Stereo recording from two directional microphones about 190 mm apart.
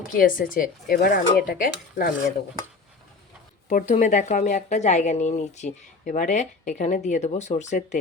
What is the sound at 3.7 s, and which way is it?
A woman's voice, 40° left (ahead or behind).